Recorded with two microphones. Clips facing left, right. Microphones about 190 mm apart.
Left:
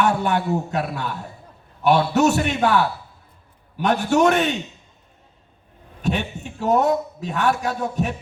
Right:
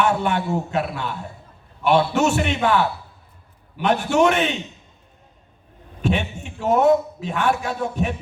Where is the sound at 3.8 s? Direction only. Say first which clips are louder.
Even; 40° left (ahead or behind).